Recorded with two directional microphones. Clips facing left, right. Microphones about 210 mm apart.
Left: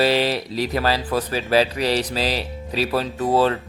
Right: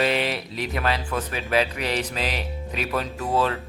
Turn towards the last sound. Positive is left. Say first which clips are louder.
# left 5 dB
turn(degrees=35)  # may be behind; listen again after turning